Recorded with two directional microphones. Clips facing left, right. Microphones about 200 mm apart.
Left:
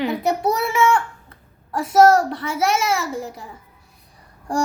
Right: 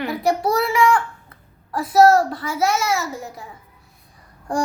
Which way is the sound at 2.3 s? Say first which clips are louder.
Even; 25° left (ahead or behind).